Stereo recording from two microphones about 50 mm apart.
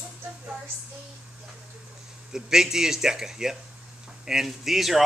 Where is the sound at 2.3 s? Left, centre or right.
Centre.